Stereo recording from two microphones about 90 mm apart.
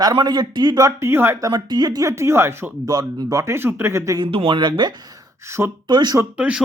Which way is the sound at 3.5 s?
25° right (ahead or behind).